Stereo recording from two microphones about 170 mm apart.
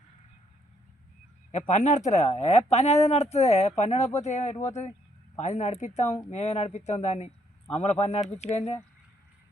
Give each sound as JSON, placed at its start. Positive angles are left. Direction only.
{"t": 1.5, "sound": "speech", "side_deg": 45}